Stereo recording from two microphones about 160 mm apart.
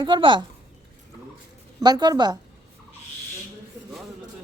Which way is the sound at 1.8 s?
25° right (ahead or behind).